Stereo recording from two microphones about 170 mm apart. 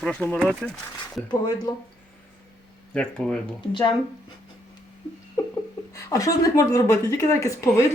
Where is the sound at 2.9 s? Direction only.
5° left (ahead or behind).